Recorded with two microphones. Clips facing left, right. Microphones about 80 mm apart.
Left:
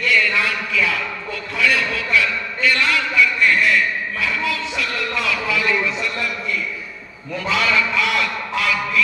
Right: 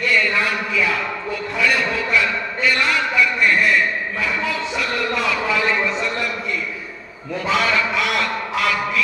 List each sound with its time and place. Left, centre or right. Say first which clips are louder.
0.7 s a sound: right 1 dB; right
7.4 s a man's voice: right 1 dB; right
7.9 s quack: even; right